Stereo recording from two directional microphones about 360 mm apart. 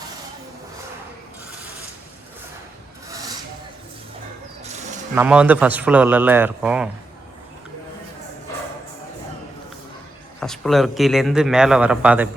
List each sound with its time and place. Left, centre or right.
4.6 s bird: centre
5.1 s speech: centre
10.4 s speech: centre